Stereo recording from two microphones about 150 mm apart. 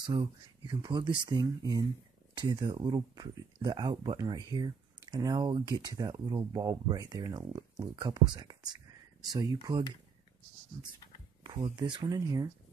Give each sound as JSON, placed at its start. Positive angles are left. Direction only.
{"t": 0.0, "sound": "speech", "side_deg": -35}
{"t": 11.7, "sound": "speech", "side_deg": -30}